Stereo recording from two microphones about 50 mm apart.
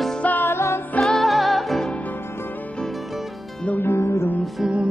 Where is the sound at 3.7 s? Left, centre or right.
Left.